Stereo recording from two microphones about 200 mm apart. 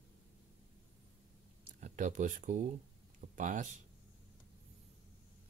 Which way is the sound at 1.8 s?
40° right (ahead or behind).